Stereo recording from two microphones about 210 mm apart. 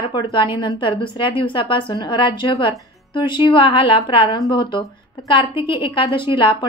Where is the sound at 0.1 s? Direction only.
20° left (ahead or behind).